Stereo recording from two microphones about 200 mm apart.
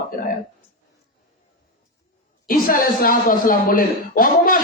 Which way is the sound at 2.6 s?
45° left (ahead or behind).